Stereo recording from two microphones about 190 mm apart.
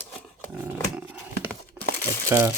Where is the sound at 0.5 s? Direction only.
10° right (ahead or behind).